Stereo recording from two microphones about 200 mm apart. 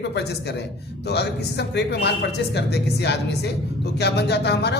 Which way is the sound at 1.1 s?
55° left (ahead or behind).